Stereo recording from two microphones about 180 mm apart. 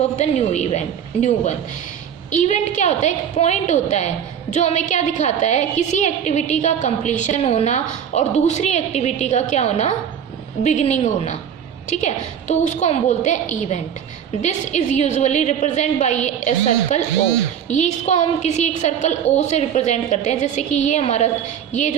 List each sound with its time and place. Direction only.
0.2 s a woman's voice: 40° left (ahead or behind)